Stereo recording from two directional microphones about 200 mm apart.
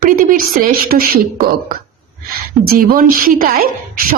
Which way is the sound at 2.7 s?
45° right (ahead or behind).